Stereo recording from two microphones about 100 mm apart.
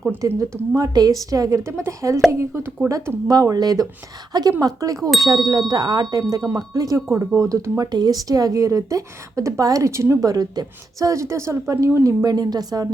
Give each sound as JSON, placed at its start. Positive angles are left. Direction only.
{"t": 0.2, "sound": "speech", "side_deg": -35}
{"t": 3.2, "sound": "speech", "side_deg": -35}